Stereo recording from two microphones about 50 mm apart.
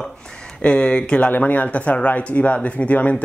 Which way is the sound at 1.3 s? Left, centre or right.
Left.